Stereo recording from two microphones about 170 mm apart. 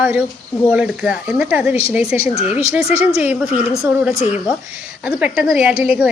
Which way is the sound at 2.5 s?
10° right (ahead or behind).